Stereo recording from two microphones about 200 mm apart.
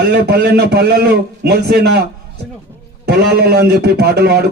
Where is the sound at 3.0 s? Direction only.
55° right (ahead or behind).